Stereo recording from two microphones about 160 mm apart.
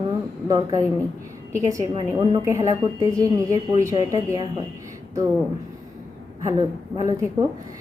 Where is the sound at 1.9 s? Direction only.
30° right (ahead or behind).